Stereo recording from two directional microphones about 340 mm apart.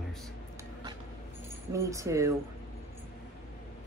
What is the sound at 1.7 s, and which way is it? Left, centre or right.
Speech, centre.